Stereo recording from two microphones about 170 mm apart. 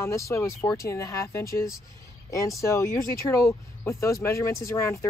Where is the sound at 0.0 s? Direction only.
15° left (ahead or behind).